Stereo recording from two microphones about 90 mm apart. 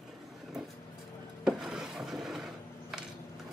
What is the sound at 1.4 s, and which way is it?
Wood, 5° right (ahead or behind).